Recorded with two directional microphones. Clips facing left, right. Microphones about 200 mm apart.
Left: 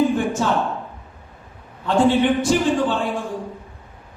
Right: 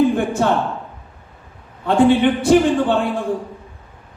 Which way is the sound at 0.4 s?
60° right (ahead or behind).